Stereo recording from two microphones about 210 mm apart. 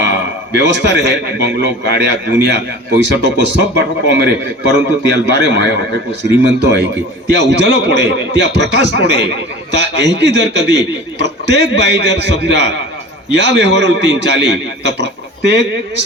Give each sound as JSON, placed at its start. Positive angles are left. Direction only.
{"t": 0.0, "sound": "a man's voice", "side_deg": -55}
{"t": 7.3, "sound": "a man's voice", "side_deg": -55}